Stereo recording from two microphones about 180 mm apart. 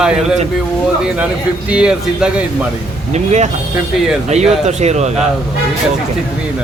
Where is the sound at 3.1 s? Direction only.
40° right (ahead or behind).